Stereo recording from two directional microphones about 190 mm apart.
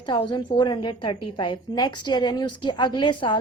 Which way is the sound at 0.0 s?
25° left (ahead or behind).